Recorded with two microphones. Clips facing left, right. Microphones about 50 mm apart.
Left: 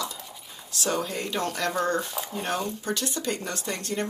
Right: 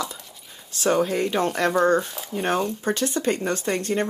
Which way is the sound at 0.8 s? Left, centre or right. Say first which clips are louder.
Right 8 dB; right.